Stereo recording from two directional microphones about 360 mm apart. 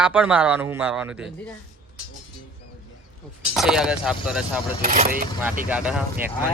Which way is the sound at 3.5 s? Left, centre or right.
Centre.